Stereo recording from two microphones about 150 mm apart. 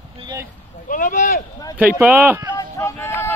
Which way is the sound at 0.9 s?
60° left (ahead or behind).